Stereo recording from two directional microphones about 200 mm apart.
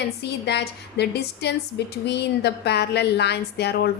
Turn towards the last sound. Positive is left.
turn(degrees=55)  # may be behind; listen again after turning